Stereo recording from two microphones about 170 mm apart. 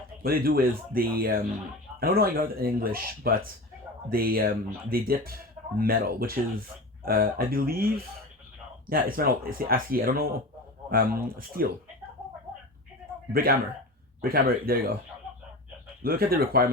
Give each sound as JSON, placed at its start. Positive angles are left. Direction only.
{"t": 0.2, "sound": "speech", "side_deg": -60}
{"t": 8.9, "sound": "speech", "side_deg": -60}
{"t": 13.3, "sound": "speech", "side_deg": -60}
{"t": 16.0, "sound": "speech", "side_deg": -60}